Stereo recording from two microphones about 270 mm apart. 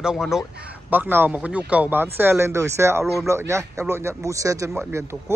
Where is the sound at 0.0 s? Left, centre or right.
Centre.